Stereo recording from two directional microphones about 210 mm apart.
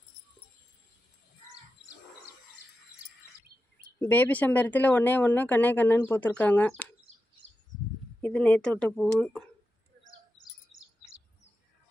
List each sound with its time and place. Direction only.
4.0 s speech: 10° left (ahead or behind)
7.1 s a sound: 30° right (ahead or behind)
8.2 s speech: 5° left (ahead or behind)